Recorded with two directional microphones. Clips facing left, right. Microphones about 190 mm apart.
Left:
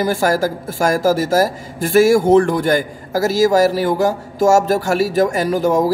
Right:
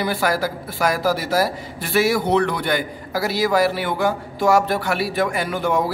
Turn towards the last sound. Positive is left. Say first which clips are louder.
# left 6 dB
turn(degrees=40)  # may be behind; listen again after turning